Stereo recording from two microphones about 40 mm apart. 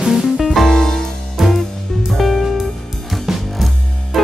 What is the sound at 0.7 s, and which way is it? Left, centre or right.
Music, centre.